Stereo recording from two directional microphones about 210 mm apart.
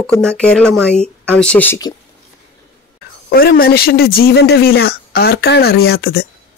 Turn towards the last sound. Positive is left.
turn(degrees=50)  # may be behind; listen again after turning